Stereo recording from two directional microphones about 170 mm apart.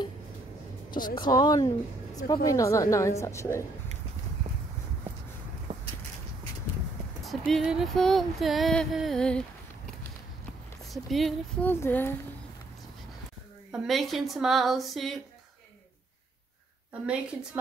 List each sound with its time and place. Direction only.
0.9 s a woman's voice: 25° left (ahead or behind)
7.2 s music: centre (ahead or behind)
10.9 s music: centre (ahead or behind)
11.6 s a woman's voice: 10° left (ahead or behind)
13.7 s music: centre (ahead or behind)
17.0 s music: 5° right (ahead or behind)